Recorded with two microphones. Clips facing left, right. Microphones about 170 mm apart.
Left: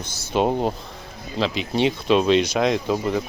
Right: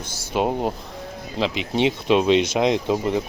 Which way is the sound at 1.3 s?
15° right (ahead or behind).